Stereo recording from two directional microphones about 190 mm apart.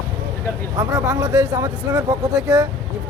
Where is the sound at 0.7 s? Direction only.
20° right (ahead or behind).